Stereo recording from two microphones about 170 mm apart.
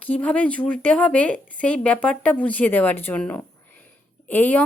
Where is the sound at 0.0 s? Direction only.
10° left (ahead or behind).